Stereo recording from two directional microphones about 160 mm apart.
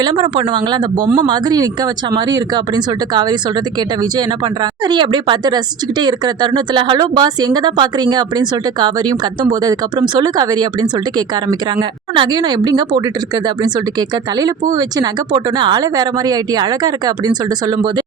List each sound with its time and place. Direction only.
0.0 s speech: 30° right (ahead or behind)
1.0 s speech: 50° right (ahead or behind)
1.3 s speech: 25° right (ahead or behind)
4.6 s speech: 30° right (ahead or behind)
11.8 s speech: 30° right (ahead or behind)
14.8 s speech: 25° right (ahead or behind)